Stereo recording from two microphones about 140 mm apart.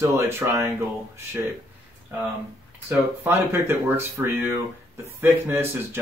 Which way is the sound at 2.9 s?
15° right (ahead or behind).